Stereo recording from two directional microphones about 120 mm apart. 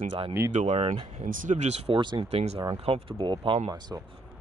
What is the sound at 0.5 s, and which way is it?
Speech, 75° right (ahead or behind).